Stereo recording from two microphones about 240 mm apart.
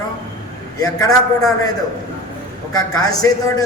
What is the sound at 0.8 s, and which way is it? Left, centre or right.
Speech, centre.